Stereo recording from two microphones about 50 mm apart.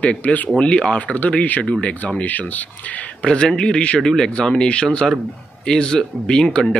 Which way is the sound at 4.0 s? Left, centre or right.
Centre.